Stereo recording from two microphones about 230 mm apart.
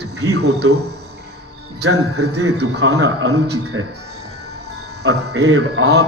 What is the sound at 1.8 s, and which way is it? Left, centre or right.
A man's voice, right.